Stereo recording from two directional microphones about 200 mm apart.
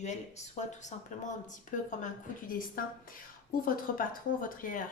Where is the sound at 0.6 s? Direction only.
35° left (ahead or behind).